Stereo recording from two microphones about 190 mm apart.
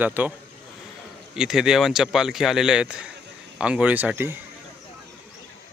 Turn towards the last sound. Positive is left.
turn(degrees=-10)  # may be behind; listen again after turning